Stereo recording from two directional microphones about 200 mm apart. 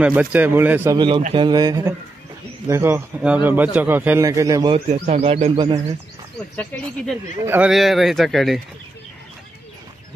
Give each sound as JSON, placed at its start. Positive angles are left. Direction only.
{"t": 0.0, "sound": "a man's voice", "side_deg": -5}
{"t": 0.9, "sound": "a man's voice", "side_deg": -25}
{"t": 4.9, "sound": "speech", "side_deg": -35}
{"t": 6.5, "sound": "speech", "side_deg": 5}
{"t": 7.4, "sound": "speech", "side_deg": -5}